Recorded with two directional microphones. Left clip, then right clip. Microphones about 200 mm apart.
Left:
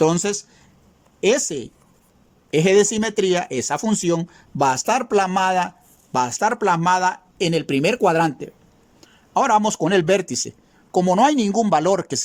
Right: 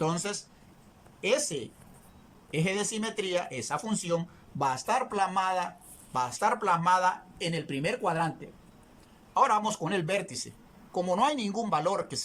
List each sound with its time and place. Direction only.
0.0 s speech: 55° left (ahead or behind)